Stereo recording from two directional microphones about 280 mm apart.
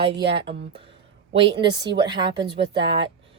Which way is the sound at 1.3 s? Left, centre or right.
Centre.